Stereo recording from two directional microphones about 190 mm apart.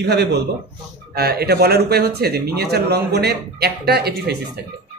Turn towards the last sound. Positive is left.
turn(degrees=-55)  # may be behind; listen again after turning